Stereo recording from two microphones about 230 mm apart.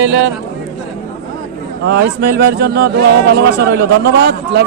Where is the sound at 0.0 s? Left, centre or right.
Right.